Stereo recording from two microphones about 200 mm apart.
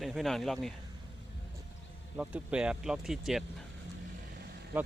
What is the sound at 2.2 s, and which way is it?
Speech, 5° right (ahead or behind).